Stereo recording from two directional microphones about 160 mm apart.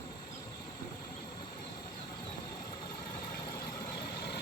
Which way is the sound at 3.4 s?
25° left (ahead or behind).